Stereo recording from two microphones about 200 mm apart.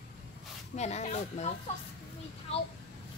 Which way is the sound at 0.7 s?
35° left (ahead or behind).